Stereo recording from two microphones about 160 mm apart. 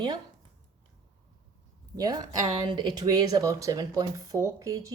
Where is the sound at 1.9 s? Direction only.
25° right (ahead or behind).